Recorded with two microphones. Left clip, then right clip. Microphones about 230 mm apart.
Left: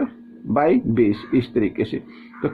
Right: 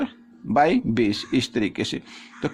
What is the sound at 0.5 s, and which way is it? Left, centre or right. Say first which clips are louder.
Speech: left 1 dB; right.